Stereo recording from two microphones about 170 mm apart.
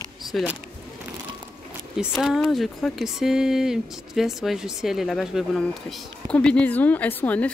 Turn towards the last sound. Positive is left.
turn(degrees=10)  # may be behind; listen again after turning